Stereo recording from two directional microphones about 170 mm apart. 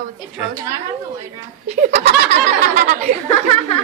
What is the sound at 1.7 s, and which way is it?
Speech, 40° right (ahead or behind).